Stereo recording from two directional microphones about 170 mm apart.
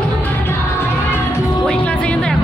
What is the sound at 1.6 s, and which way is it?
Music, 5° left (ahead or behind).